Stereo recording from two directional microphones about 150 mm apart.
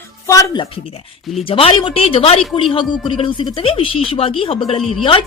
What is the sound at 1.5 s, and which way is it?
Speech, 35° left (ahead or behind).